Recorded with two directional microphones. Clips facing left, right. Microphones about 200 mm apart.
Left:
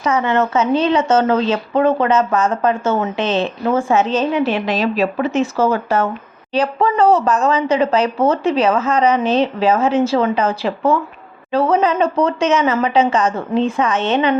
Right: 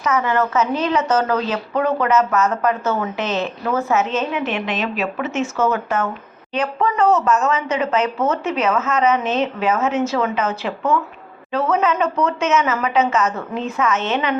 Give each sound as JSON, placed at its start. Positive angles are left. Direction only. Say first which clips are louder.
{"t": 0.0, "sound": "a woman's voice", "louder": "left 3 dB", "side_deg": 30}